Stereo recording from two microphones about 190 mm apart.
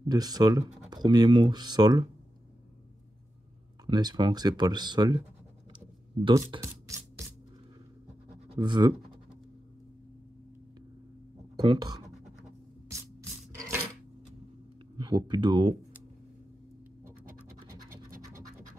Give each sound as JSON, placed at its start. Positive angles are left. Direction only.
{"t": 0.1, "sound": "speech", "side_deg": -20}
{"t": 3.8, "sound": "speech", "side_deg": -20}
{"t": 6.2, "sound": "rub", "side_deg": -20}
{"t": 8.5, "sound": "speech", "side_deg": -25}
{"t": 11.5, "sound": "speech", "side_deg": -25}
{"t": 15.0, "sound": "speech", "side_deg": -20}